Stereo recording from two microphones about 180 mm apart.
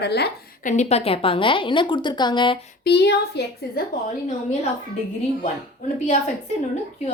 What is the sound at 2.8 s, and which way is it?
Speech, 70° left (ahead or behind).